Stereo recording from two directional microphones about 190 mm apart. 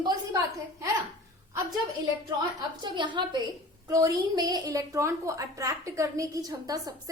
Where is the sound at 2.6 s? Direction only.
25° right (ahead or behind).